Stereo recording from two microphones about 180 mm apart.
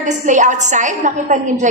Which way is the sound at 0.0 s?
45° right (ahead or behind).